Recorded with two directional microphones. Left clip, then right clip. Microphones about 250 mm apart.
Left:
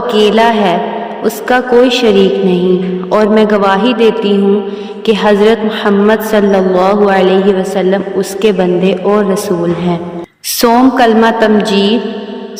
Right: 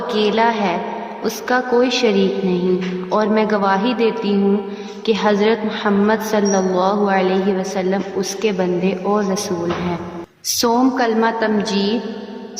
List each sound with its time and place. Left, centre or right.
0.1 s a woman's voice: left
10.6 s a woman's voice: left